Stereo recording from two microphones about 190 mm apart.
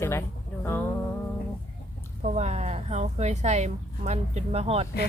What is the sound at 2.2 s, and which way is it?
A woman's voice, 35° right (ahead or behind).